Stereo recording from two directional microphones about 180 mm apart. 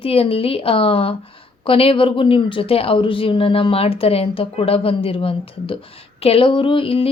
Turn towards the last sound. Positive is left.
turn(degrees=30)  # may be behind; listen again after turning